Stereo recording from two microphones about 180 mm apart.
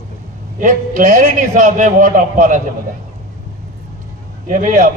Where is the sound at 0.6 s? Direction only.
45° right (ahead or behind).